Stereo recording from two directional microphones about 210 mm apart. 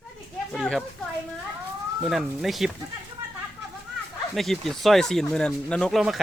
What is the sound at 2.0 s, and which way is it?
Speech, centre (ahead or behind).